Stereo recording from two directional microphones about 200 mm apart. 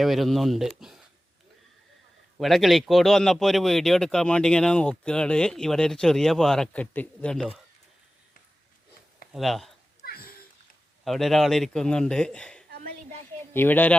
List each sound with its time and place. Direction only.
0.0 s speech: centre (ahead or behind)
2.4 s speech: centre (ahead or behind)
9.3 s speech: centre (ahead or behind)
10.0 s a sound: 45° left (ahead or behind)
11.0 s speech: centre (ahead or behind)